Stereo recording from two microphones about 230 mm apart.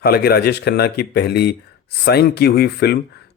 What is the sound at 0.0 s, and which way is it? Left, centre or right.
Speech, left.